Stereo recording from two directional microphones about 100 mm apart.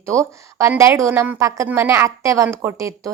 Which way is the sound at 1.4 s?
35° right (ahead or behind).